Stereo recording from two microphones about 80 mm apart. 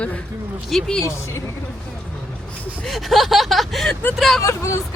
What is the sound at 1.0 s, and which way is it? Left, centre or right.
Speech, left.